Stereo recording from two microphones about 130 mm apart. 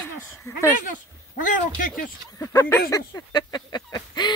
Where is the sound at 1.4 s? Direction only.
90° left.